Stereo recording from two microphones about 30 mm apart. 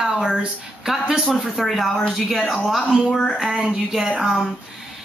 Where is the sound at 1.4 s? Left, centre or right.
Centre.